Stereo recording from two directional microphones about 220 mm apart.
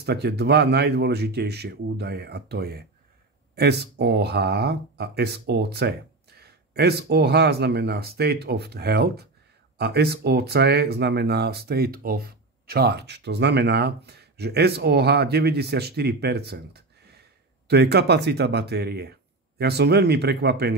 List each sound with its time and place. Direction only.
0.0 s speech: 45° right (ahead or behind)